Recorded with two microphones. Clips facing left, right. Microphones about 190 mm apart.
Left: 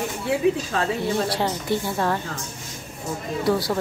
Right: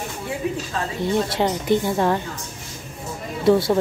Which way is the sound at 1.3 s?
20° right (ahead or behind).